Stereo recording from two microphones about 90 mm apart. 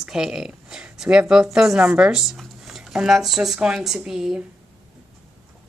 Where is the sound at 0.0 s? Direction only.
5° right (ahead or behind).